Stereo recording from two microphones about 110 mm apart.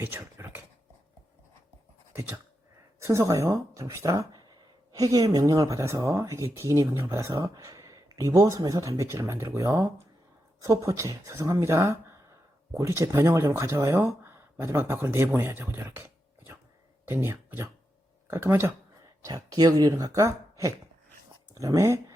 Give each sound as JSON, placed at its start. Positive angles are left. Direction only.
{"t": 0.0, "sound": "a sound", "side_deg": -20}
{"t": 3.0, "sound": "speech", "side_deg": -30}
{"t": 19.2, "sound": "speech", "side_deg": -35}